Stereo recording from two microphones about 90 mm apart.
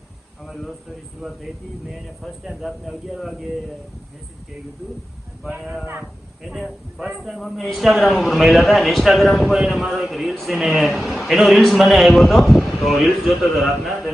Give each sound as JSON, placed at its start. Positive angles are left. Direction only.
{"t": 0.4, "sound": "a man's voice", "side_deg": 0}
{"t": 5.5, "sound": "a man's voice", "side_deg": -15}